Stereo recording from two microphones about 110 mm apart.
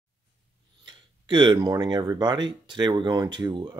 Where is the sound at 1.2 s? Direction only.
45° right (ahead or behind).